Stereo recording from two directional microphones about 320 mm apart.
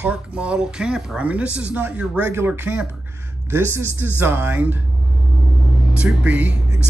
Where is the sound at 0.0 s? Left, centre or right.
Centre.